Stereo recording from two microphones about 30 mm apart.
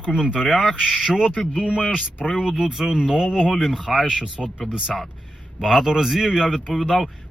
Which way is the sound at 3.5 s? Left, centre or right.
Centre.